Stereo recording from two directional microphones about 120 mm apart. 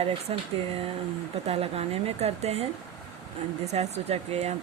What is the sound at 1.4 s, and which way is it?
Speech, 60° right (ahead or behind).